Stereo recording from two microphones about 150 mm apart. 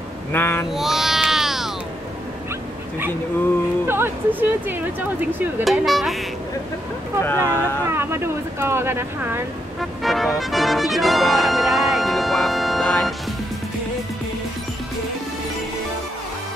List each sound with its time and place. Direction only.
0.3 s speech: 15° left (ahead or behind)
0.7 s a sound: centre (ahead or behind)
3.8 s speech: 15° right (ahead or behind)
5.6 s speech: centre (ahead or behind)
7.2 s speech: 15° left (ahead or behind)
7.8 s speech: 15° right (ahead or behind)
9.8 s speech: centre (ahead or behind)